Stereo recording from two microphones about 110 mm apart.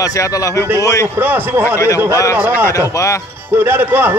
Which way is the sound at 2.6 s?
30° left (ahead or behind).